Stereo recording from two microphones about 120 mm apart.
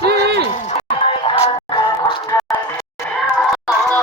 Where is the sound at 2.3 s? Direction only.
25° left (ahead or behind).